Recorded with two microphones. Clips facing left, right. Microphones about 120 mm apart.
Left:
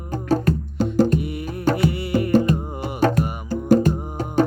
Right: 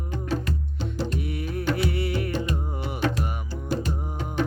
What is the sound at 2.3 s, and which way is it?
Music, 45° left (ahead or behind).